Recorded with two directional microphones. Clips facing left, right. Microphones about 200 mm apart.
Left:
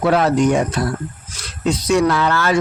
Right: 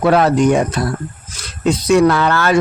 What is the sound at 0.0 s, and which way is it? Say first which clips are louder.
Speech: right 3 dB; 60° right (ahead or behind).